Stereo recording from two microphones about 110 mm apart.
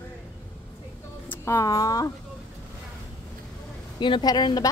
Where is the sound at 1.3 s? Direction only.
25° left (ahead or behind).